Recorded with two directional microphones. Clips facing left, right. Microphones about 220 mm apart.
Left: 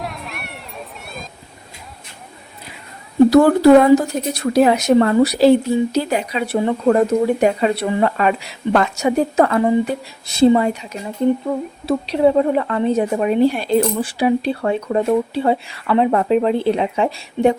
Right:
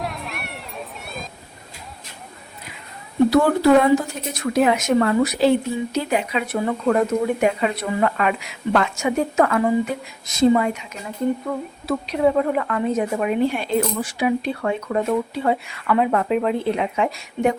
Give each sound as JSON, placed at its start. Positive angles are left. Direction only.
{"t": 0.0, "sound": "a sound", "side_deg": 0}
{"t": 3.2, "sound": "speech", "side_deg": 40}
{"t": 11.9, "sound": "speech", "side_deg": 30}